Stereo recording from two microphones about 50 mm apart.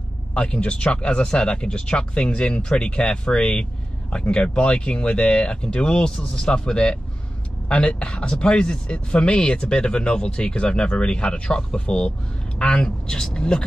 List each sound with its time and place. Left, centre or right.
0.3 s speech: left